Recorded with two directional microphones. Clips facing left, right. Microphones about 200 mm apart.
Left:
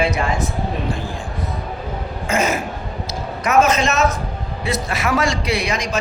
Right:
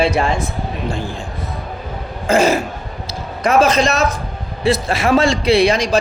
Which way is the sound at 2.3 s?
30° right (ahead or behind).